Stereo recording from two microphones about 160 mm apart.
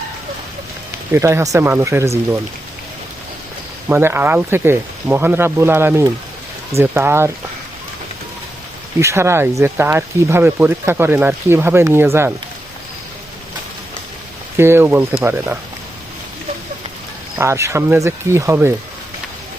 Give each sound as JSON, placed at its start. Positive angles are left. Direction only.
{"t": 1.1, "sound": "speech", "side_deg": -15}
{"t": 3.8, "sound": "speech", "side_deg": -15}
{"t": 9.0, "sound": "speech", "side_deg": -15}
{"t": 14.5, "sound": "speech", "side_deg": -15}
{"t": 17.3, "sound": "speech", "side_deg": -15}